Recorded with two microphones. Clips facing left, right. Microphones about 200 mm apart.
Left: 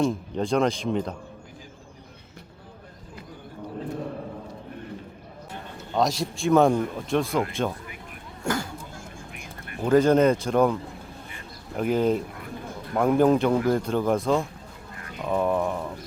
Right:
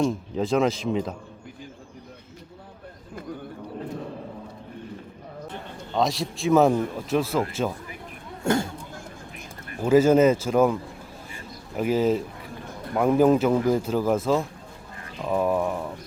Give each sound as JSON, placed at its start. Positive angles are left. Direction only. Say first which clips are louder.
{"t": 0.0, "sound": "a man's voice", "louder": "even", "side_deg": 0}
{"t": 5.9, "sound": "a man's voice", "louder": "even", "side_deg": 0}
{"t": 8.4, "sound": "speech", "louder": "right 5 dB", "side_deg": -25}
{"t": 9.8, "sound": "a man's voice", "louder": "right 1 dB", "side_deg": -5}
{"t": 11.8, "sound": "a man's voice", "louder": "right 1 dB", "side_deg": -5}